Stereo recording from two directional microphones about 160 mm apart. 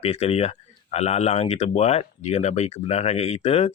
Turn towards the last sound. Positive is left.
turn(degrees=40)  # may be behind; listen again after turning